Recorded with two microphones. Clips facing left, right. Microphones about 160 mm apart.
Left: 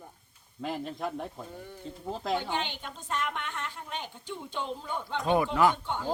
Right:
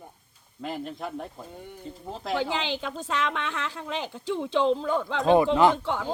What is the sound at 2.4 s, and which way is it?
A woman's voice, 90° right.